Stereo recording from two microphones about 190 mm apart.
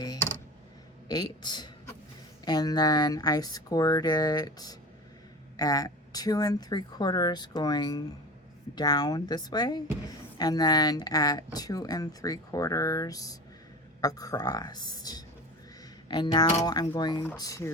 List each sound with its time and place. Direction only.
1.0 s speech: 20° left (ahead or behind)